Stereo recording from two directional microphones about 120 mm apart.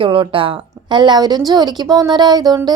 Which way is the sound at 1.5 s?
35° right (ahead or behind).